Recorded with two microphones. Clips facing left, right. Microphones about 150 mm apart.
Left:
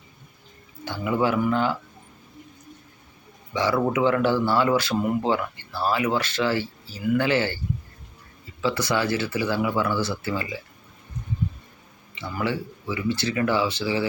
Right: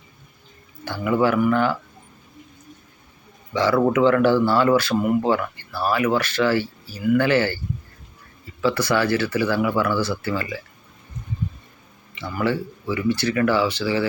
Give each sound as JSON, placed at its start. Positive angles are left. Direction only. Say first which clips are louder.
{"t": 0.9, "sound": "speech", "louder": "right 3 dB", "side_deg": 20}
{"t": 3.5, "sound": "speech", "louder": "right 4 dB", "side_deg": 20}
{"t": 8.6, "sound": "speech", "louder": "right 4 dB", "side_deg": 20}
{"t": 12.4, "sound": "speech", "louder": "right 4 dB", "side_deg": 20}